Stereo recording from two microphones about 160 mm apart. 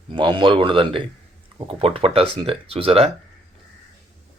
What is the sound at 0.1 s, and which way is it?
Speech, 30° right (ahead or behind).